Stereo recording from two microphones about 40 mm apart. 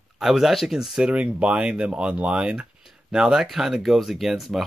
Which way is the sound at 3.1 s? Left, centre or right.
Centre.